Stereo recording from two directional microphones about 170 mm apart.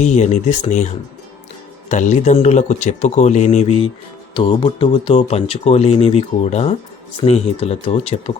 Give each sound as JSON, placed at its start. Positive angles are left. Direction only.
{"t": 0.0, "sound": "speech", "side_deg": 45}